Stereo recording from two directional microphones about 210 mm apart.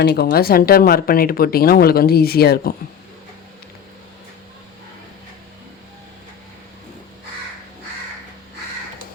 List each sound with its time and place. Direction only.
0.0 s speech: 50° left (ahead or behind)